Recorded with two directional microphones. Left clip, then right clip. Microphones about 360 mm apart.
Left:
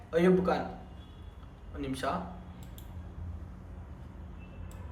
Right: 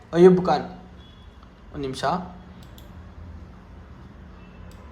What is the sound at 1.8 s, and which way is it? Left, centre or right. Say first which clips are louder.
Speech: right 9 dB; centre.